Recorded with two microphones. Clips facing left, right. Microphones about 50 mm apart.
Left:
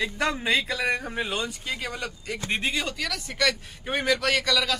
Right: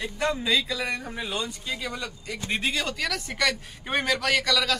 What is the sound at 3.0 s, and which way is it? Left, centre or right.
A man's voice, centre.